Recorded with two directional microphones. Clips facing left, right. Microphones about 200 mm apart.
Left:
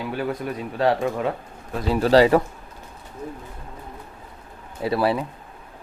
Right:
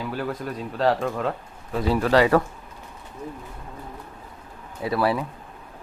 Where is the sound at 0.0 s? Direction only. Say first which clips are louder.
Left 2 dB; centre (ahead or behind).